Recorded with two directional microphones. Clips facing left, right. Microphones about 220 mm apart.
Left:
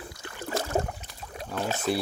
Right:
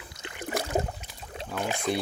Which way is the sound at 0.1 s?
20° right (ahead or behind).